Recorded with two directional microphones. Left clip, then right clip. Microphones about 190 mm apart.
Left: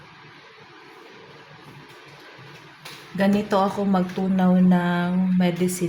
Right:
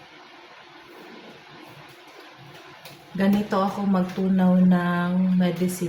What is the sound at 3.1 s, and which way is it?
Speech, 35° left (ahead or behind).